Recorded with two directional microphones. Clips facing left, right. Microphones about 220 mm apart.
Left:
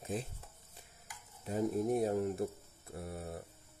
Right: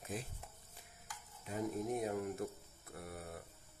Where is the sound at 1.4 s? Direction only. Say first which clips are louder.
Left 6 dB; 35° left (ahead or behind).